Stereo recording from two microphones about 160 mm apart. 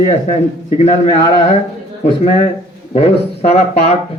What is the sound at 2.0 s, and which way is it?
Speech, 40° left (ahead or behind).